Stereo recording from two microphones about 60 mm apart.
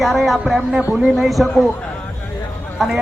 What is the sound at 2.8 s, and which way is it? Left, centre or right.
Speech, centre.